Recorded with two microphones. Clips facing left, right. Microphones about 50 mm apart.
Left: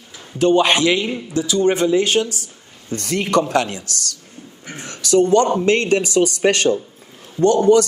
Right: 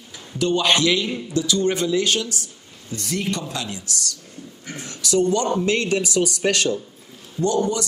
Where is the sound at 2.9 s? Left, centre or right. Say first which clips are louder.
Left 8 dB; left.